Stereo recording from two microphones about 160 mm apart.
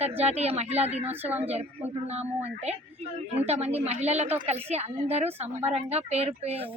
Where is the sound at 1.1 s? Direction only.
10° right (ahead or behind).